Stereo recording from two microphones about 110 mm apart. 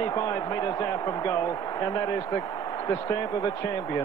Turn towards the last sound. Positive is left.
turn(degrees=30)  # may be behind; listen again after turning